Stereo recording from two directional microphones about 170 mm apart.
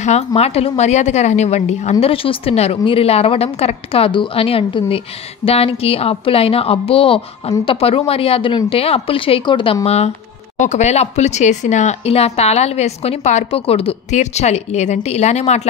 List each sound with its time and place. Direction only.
0.0 s a woman's voice: 40° left (ahead or behind)